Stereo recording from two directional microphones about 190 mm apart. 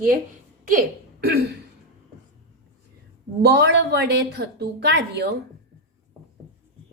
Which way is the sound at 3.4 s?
60° right (ahead or behind).